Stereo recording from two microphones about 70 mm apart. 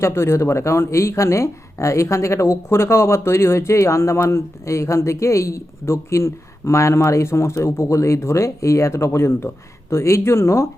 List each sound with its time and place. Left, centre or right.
0.0 s speech: left